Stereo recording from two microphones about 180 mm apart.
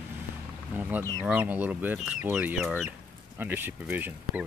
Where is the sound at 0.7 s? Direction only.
10° right (ahead or behind).